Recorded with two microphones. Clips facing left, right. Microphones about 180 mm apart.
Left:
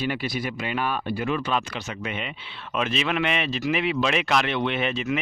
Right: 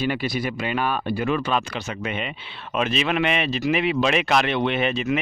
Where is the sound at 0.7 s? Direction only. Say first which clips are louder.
Right 2 dB; 75° right (ahead or behind).